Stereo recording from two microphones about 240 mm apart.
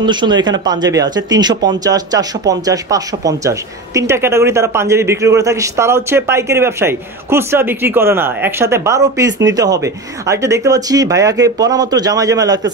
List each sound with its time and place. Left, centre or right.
0.0 s speech: centre